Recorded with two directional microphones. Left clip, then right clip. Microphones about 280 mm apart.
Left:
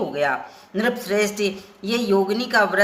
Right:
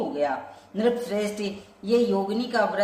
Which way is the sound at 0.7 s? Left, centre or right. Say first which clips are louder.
Left 3 dB; left.